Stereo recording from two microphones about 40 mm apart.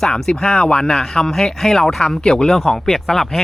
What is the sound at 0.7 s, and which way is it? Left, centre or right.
Speech, left.